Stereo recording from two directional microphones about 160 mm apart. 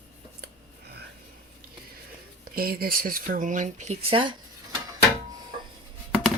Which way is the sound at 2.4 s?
70° right (ahead or behind).